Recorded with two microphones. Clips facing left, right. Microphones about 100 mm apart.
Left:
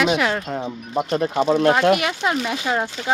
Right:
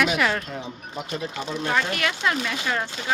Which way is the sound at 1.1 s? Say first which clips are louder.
Left 12 dB; 60° left (ahead or behind).